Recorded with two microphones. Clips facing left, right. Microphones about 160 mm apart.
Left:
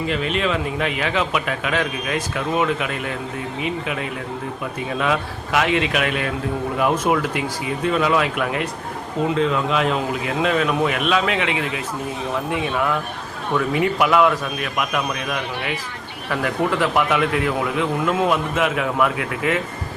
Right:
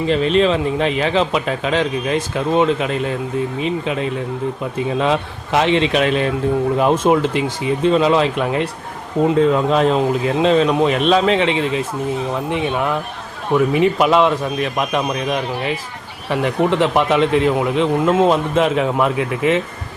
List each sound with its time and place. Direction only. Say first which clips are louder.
0.1 s a man's voice: right 9 dB; 30° right (ahead or behind)